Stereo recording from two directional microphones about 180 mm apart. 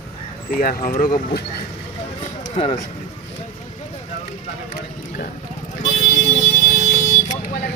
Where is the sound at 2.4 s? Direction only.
30° left (ahead or behind).